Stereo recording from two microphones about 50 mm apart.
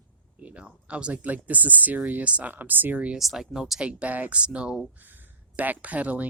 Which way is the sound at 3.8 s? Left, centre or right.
Right.